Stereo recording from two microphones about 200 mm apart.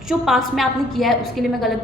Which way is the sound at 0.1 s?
Centre (ahead or behind).